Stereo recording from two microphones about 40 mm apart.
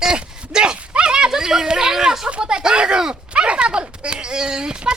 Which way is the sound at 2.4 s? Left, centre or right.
Centre.